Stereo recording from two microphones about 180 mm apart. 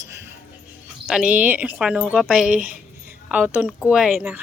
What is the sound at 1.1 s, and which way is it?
Speech, 5° right (ahead or behind).